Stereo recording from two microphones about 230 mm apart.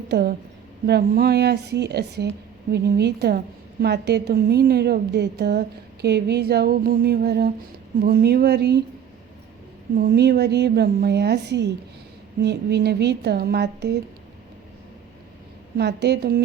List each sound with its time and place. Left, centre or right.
0.1 s a woman's voice: right
9.9 s a woman's voice: right
15.8 s a woman's voice: right